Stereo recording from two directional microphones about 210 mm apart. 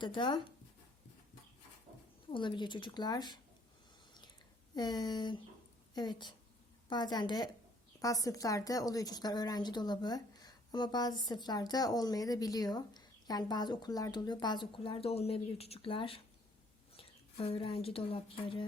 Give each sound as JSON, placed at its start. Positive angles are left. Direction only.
{"t": 0.0, "sound": "a woman's voice", "side_deg": 20}
{"t": 2.3, "sound": "a woman's voice", "side_deg": 20}
{"t": 4.7, "sound": "a woman's voice", "side_deg": 20}